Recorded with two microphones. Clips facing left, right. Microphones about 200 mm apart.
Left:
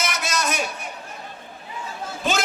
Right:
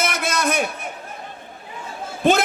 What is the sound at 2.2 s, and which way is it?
Speech, 55° right (ahead or behind).